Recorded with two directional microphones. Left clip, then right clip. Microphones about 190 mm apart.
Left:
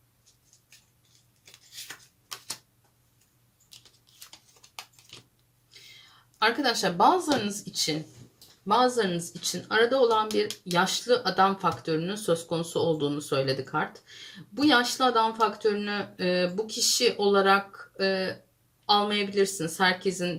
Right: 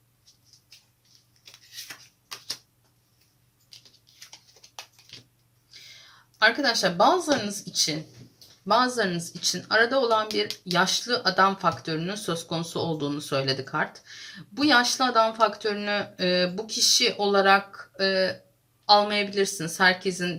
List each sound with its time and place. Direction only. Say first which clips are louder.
6.4 s a woman's voice: right 3 dB; 30° right (ahead or behind)